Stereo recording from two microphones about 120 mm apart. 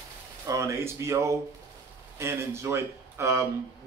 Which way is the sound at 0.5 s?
25° right (ahead or behind).